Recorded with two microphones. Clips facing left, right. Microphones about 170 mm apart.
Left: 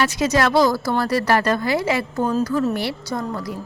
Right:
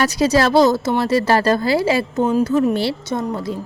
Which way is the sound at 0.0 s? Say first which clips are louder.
Right 3 dB; 35° right (ahead or behind).